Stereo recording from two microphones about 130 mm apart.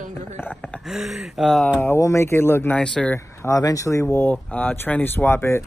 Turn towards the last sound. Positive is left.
turn(degrees=20)  # may be behind; listen again after turning